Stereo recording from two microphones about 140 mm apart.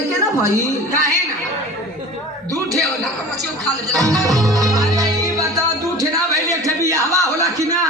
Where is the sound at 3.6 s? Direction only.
25° right (ahead or behind).